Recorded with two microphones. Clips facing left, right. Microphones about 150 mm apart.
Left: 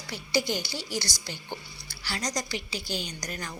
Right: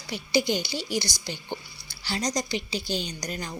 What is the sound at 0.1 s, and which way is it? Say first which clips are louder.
A woman's voice: right 3 dB; 15° right (ahead or behind).